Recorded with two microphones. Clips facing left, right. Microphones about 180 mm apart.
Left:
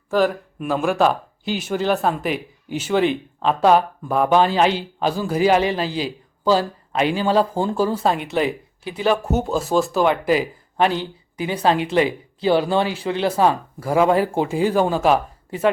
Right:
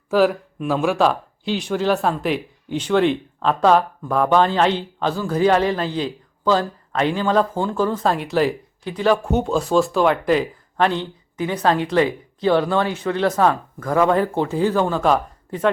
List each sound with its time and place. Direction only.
0.1 s speech: centre (ahead or behind)
11.4 s speech: 25° left (ahead or behind)
13.7 s speech: 10° left (ahead or behind)